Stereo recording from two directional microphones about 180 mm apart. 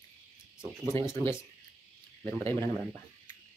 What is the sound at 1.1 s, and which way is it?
Speech, 15° left (ahead or behind).